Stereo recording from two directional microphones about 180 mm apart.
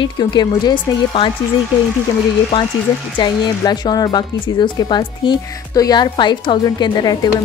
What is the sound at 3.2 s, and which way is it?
Speech, 25° left (ahead or behind).